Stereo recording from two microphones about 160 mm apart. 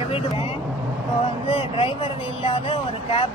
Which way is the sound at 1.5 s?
35° left (ahead or behind).